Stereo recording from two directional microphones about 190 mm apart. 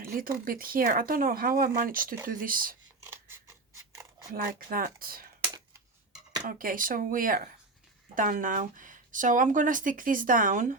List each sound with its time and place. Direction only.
0.0 s speech: 45° right (ahead or behind)
4.3 s speech: 50° right (ahead or behind)
6.4 s speech: 45° right (ahead or behind)